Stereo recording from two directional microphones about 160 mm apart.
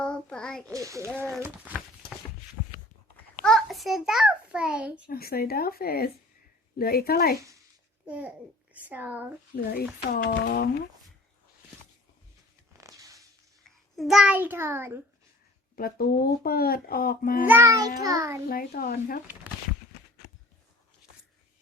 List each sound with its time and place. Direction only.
0.0 s a child's voice: 5° left (ahead or behind)
0.7 s child singing: 20° right (ahead or behind)
1.2 s a child's voice: 15° right (ahead or behind)
3.4 s a child's voice: centre (ahead or behind)
5.0 s speech: 70° left (ahead or behind)
8.0 s a child's voice: 10° right (ahead or behind)
10.1 s speech: 65° left (ahead or behind)
12.7 s zipper: 20° right (ahead or behind)
13.9 s a child's voice: centre (ahead or behind)
15.7 s speech: 65° left (ahead or behind)
17.4 s child singing: 15° right (ahead or behind)
18.4 s speech: 65° left (ahead or behind)